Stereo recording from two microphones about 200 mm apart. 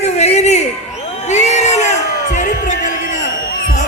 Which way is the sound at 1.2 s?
35° left (ahead or behind).